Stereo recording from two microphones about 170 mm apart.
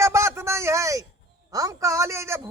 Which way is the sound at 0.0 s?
15° right (ahead or behind).